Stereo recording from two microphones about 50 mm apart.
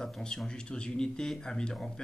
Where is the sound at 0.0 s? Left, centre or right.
Centre.